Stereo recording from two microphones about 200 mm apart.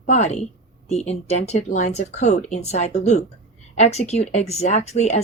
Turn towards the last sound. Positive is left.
turn(degrees=35)  # may be behind; listen again after turning